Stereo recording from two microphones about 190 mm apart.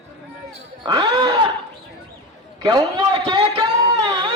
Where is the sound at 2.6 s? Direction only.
25° right (ahead or behind).